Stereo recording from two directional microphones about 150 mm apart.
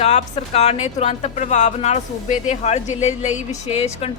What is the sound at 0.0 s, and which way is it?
A woman's voice, 45° left (ahead or behind).